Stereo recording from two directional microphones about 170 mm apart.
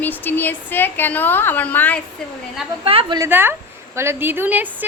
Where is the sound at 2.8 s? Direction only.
35° right (ahead or behind).